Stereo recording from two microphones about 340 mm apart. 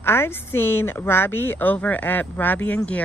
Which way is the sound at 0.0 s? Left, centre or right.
Centre.